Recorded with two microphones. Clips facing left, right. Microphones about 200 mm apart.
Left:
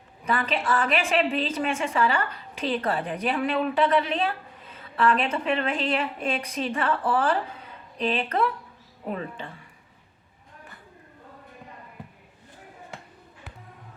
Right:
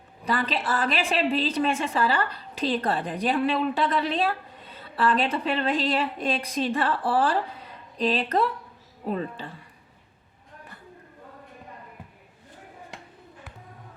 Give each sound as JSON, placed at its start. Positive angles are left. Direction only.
{"t": 0.3, "sound": "a woman's voice", "side_deg": -35}